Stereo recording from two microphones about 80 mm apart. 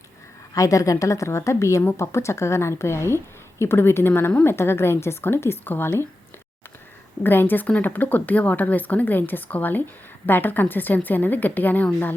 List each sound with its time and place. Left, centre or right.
0.5 s a woman's voice: left
7.2 s speech: left